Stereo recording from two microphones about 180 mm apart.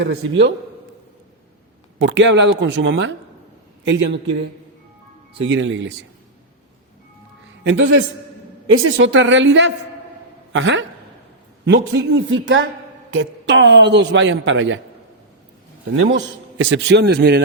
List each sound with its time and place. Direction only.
0.0 s speech: 80° right
2.0 s speech: 90° right
5.4 s a man's voice: 90° right
7.6 s a man's voice: 90° right
16.0 s a man's voice: 90° right; by 17.4 s 65° right (ahead or behind)